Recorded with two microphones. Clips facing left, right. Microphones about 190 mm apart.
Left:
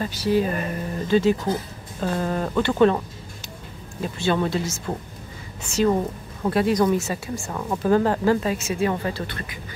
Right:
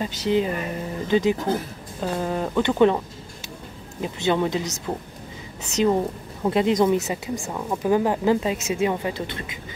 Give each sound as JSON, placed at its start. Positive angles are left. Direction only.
{"t": 0.0, "sound": "speech", "side_deg": -20}
{"t": 4.0, "sound": "speech", "side_deg": -15}